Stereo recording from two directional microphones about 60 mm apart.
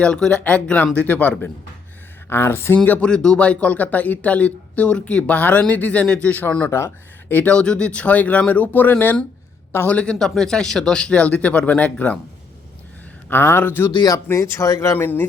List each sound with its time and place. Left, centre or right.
0.0 s speech: centre
2.3 s speech: left
2.7 s speech: left
3.0 s speech: centre; by 6.7 s left
6.7 s speech: left
7.3 s speech: left
9.8 s speech: left
13.3 s speech: left
14.3 s speech: left
14.9 s speech: left